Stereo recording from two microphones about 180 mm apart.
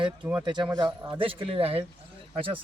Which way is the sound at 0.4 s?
25° right (ahead or behind).